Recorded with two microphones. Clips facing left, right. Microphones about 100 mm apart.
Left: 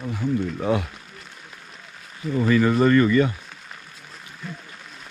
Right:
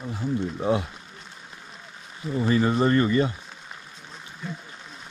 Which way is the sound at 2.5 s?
30° right (ahead or behind).